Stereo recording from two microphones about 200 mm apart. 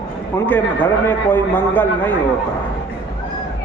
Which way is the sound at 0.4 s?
10° left (ahead or behind).